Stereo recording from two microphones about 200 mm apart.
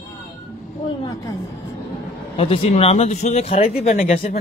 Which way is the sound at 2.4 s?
30° left (ahead or behind).